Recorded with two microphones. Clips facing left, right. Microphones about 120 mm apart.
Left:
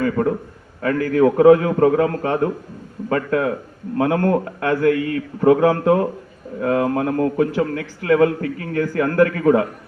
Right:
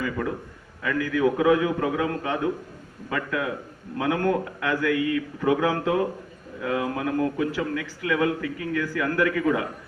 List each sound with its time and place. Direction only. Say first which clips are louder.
0.0 s a man's voice: left 9 dB; 40° left (ahead or behind)